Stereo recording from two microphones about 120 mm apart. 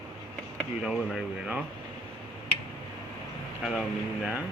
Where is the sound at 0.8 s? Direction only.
5° right (ahead or behind).